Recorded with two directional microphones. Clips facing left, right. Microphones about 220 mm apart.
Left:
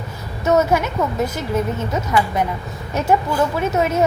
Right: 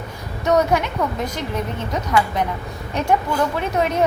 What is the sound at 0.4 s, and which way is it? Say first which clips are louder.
A woman's voice: left 1 dB; 5° left (ahead or behind).